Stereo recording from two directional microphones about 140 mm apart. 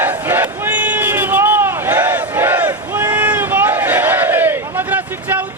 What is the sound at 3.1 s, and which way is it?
Crowd, 10° right (ahead or behind).